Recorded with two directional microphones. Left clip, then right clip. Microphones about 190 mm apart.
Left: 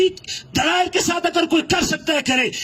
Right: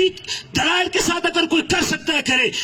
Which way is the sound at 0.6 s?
35° left (ahead or behind).